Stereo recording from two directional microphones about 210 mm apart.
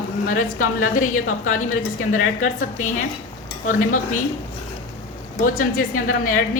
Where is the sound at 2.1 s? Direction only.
35° left (ahead or behind).